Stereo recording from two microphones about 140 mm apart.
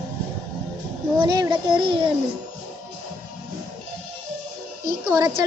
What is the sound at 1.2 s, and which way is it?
Speech, 30° right (ahead or behind).